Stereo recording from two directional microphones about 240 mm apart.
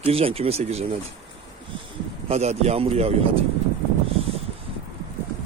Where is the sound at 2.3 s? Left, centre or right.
Right.